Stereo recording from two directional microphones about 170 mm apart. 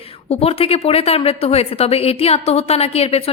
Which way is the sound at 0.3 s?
35° left (ahead or behind).